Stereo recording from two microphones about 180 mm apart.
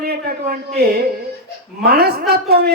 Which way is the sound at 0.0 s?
60° right (ahead or behind).